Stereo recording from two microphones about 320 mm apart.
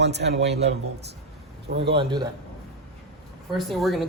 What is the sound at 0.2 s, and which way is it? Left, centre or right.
Speech, right.